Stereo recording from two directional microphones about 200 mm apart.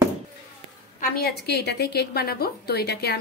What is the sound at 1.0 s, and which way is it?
A woman's voice, 50° left (ahead or behind).